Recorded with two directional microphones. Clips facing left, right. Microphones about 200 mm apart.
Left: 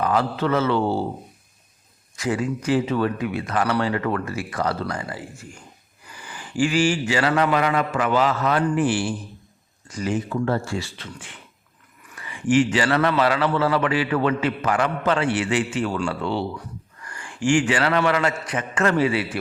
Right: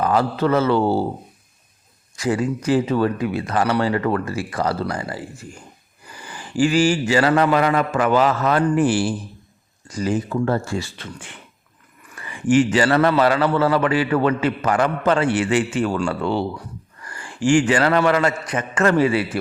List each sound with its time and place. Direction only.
0.0 s speech: 40° right (ahead or behind)
2.1 s speech: 35° right (ahead or behind)
6.6 s speech: 40° right (ahead or behind)
12.3 s a man's voice: 40° right (ahead or behind)